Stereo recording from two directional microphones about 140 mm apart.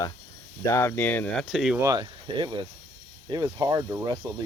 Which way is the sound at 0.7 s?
20° left (ahead or behind).